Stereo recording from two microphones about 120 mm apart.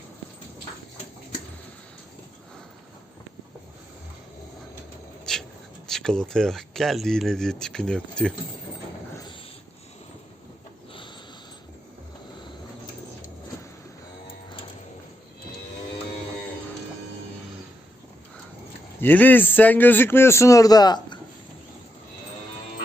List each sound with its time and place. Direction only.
5.3 s a sound: 5° left (ahead or behind)
5.9 s speech: 5° left (ahead or behind)
18.9 s a man's voice: 15° left (ahead or behind); by 21.2 s 35° left (ahead or behind)